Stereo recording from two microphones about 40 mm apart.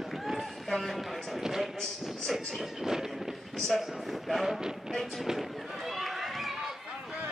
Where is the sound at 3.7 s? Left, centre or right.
Centre.